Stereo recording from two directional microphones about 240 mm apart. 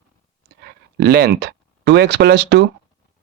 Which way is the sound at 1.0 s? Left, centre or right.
Right.